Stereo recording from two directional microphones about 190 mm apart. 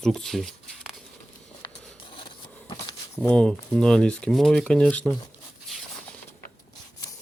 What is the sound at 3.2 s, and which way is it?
Speech, 5° left (ahead or behind).